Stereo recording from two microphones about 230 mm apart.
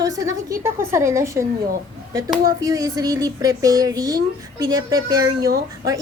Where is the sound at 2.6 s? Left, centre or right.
Centre.